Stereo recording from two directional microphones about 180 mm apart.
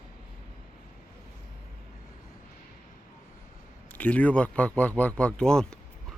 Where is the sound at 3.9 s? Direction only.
10° left (ahead or behind).